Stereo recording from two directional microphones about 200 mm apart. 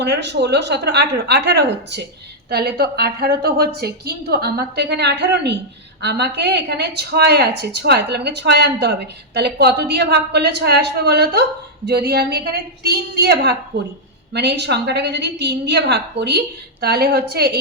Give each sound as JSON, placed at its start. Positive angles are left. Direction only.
{"t": 0.0, "sound": "a woman's voice", "side_deg": -60}